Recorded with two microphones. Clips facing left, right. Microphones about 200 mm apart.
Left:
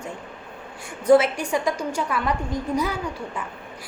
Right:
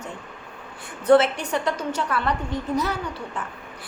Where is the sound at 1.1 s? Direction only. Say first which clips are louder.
Even; 10° left (ahead or behind).